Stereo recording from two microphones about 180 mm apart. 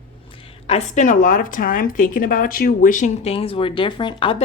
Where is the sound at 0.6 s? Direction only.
35° left (ahead or behind).